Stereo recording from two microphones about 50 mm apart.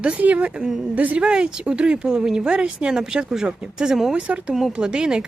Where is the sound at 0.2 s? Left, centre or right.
Right.